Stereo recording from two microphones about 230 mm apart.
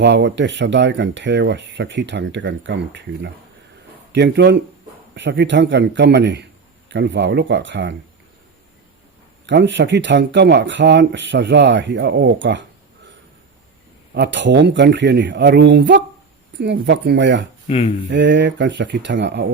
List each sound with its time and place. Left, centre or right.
0.0 s speech: right
9.5 s speech: right
14.1 s speech: right
17.7 s speech: left
18.1 s speech: right